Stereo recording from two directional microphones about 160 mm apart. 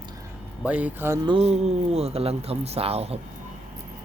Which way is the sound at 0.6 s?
10° right (ahead or behind).